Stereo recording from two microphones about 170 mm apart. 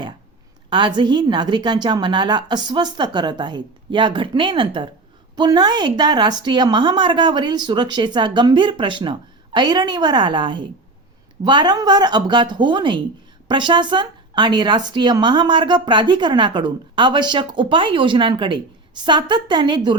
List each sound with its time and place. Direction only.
0.7 s speech: 25° right (ahead or behind)